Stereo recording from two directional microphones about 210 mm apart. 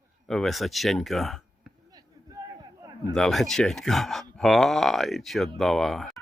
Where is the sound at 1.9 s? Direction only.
15° right (ahead or behind).